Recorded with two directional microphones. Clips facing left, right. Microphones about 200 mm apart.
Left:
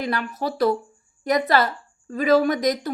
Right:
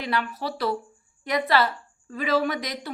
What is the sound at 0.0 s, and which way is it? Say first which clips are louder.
A woman's voice: left 3 dB; 45° left (ahead or behind).